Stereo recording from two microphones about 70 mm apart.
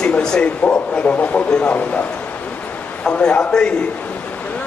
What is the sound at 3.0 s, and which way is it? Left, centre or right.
Speech, centre.